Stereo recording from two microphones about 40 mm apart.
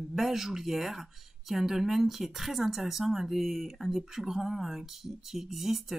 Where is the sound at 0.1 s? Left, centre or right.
Centre.